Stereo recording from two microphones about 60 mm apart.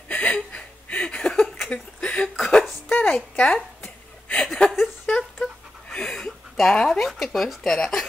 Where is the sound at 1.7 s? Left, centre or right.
Centre.